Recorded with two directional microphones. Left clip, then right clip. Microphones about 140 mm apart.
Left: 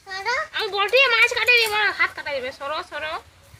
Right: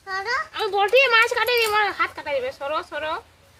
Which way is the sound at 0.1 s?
50° right (ahead or behind).